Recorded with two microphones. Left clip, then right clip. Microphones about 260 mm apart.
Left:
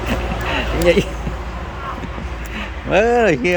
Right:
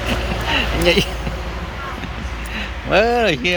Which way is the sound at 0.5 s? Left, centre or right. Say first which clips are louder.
Left 1 dB; centre.